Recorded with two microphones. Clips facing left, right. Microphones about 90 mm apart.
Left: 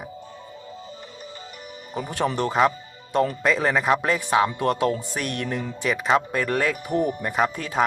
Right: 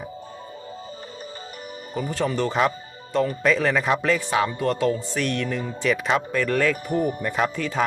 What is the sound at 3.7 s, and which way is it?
Speech, 20° left (ahead or behind).